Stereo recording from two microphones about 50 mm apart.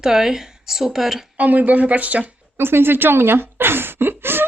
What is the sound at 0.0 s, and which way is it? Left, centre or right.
A woman's voice, centre.